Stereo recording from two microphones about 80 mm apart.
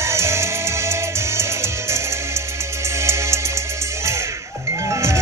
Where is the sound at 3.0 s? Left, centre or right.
Right.